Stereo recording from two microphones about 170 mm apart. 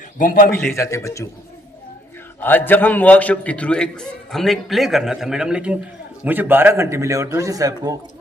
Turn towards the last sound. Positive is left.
turn(degrees=-20)  # may be behind; listen again after turning